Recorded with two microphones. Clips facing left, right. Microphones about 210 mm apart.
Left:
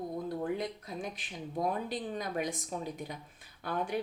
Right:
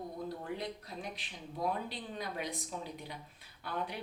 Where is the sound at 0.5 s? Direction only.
50° left (ahead or behind).